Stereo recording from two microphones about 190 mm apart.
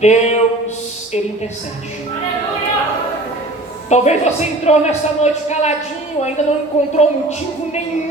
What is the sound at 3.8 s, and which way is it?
A woman's voice, 35° left (ahead or behind).